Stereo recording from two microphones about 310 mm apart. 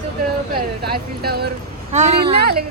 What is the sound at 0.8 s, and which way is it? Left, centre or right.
A woman's voice, right.